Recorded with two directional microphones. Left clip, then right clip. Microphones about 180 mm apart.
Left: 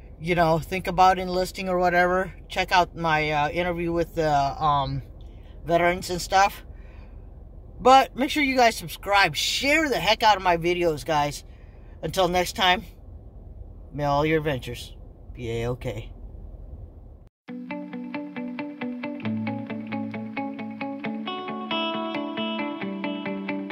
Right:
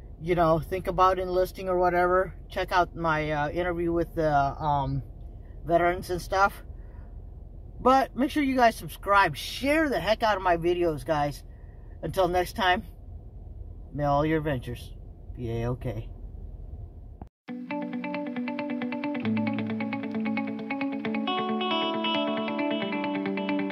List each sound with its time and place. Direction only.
0.2 s speech: 15° left (ahead or behind)
7.8 s speech: 10° left (ahead or behind)
13.9 s speech: 15° left (ahead or behind)
17.2 s music: centre (ahead or behind)